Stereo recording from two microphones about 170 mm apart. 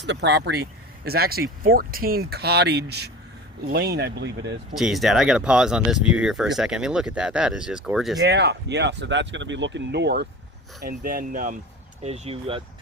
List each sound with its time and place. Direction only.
0.0 s speech: 90° right
4.7 s speech: centre (ahead or behind)
8.2 s speech: 75° right (ahead or behind)
10.8 s speech: 60° right (ahead or behind)
12.0 s speech: 40° right (ahead or behind)